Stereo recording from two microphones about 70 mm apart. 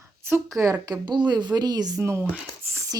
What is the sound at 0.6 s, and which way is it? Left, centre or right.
A woman's voice, right.